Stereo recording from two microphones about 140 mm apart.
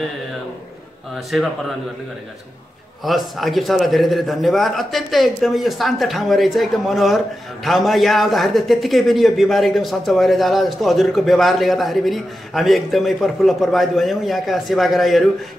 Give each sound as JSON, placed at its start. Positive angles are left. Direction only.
{"t": 1.1, "sound": "a man's voice", "side_deg": 0}
{"t": 3.0, "sound": "a man's voice", "side_deg": 0}